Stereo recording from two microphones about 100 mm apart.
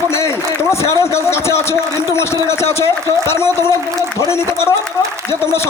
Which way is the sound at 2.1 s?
25° left (ahead or behind).